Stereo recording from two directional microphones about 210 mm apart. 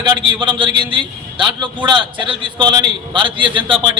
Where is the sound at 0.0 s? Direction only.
20° right (ahead or behind).